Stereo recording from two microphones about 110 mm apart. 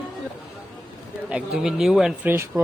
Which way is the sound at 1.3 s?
5° right (ahead or behind).